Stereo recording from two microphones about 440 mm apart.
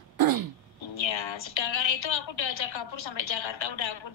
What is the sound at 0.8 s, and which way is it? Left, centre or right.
A woman's voice, left.